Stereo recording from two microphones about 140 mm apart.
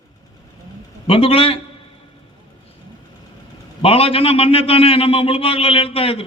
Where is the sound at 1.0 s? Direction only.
40° left (ahead or behind).